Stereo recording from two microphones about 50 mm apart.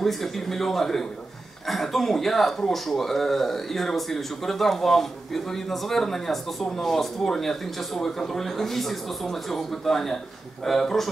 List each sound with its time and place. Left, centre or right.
0.0 s speech: centre